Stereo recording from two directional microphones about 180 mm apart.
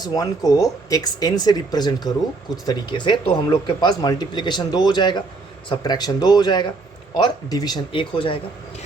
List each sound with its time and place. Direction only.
0.0 s speech: 20° left (ahead or behind)